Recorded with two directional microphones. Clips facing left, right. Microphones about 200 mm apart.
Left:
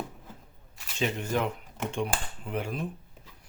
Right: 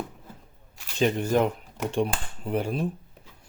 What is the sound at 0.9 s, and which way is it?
Speech, 40° right (ahead or behind).